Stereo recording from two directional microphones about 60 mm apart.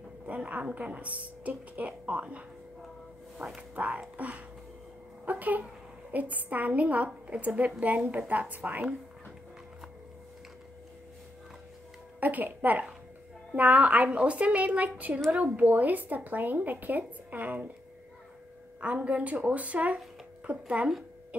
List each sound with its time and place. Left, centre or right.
0.3 s a woman's voice: right
12.2 s a woman's voice: right
18.8 s a woman's voice: right